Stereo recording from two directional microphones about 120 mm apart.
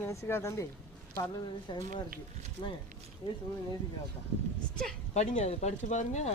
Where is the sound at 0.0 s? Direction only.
20° left (ahead or behind).